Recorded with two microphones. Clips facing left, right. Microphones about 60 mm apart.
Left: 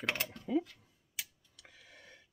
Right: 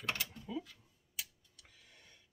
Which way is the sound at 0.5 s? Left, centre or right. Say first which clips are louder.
Left 12 dB; left.